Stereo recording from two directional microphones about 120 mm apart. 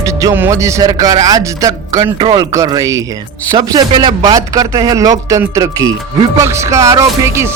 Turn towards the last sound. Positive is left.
turn(degrees=-25)  # may be behind; listen again after turning